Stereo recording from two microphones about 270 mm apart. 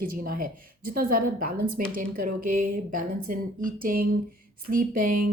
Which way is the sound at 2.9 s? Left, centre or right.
Right.